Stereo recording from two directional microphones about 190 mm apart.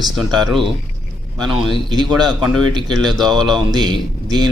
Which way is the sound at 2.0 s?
Centre (ahead or behind).